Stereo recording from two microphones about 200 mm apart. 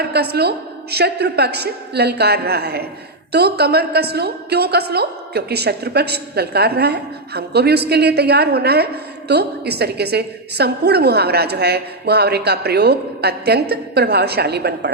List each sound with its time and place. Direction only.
0.0 s a woman's voice: 55° right (ahead or behind)